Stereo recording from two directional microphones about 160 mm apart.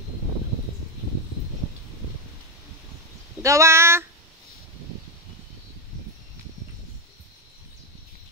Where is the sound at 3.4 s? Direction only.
20° right (ahead or behind).